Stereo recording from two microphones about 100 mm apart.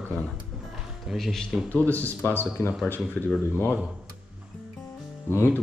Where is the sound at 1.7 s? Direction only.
15° left (ahead or behind).